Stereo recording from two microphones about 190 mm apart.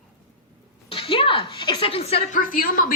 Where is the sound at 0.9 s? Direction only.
30° left (ahead or behind).